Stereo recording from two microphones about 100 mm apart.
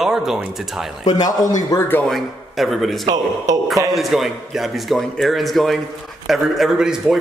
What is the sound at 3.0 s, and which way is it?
Speech, 40° right (ahead or behind).